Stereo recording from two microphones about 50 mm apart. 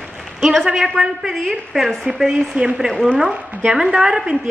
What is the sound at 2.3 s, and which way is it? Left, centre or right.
Speech, centre.